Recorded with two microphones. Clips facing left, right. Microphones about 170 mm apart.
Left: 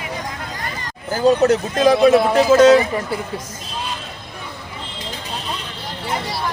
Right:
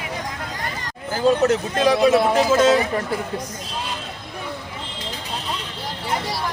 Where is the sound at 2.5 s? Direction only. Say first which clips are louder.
Left 7 dB; 70° left (ahead or behind).